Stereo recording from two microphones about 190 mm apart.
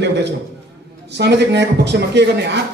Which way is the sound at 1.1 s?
65° right (ahead or behind).